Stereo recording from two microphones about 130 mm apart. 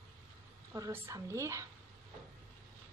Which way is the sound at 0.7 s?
25° right (ahead or behind).